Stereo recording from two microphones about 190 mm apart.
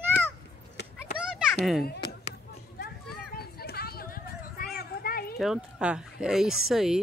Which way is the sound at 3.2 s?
55° left (ahead or behind).